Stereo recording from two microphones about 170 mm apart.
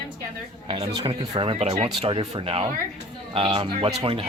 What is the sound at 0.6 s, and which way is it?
Speech, 30° right (ahead or behind).